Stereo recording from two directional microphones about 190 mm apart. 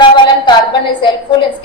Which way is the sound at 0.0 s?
25° left (ahead or behind).